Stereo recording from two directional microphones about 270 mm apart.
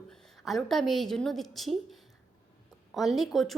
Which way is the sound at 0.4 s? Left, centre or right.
Centre.